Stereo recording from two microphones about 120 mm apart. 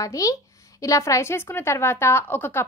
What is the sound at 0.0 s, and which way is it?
A woman's voice, 30° left (ahead or behind).